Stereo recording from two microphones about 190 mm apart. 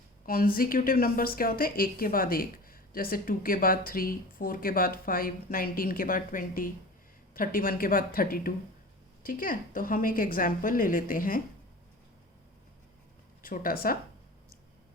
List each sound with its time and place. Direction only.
0.3 s a woman's voice: 50° left (ahead or behind)
13.4 s a woman's voice: 50° left (ahead or behind)